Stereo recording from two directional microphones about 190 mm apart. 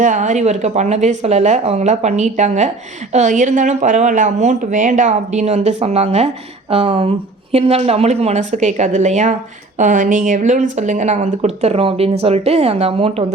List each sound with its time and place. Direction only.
0.0 s speech: 40° right (ahead or behind)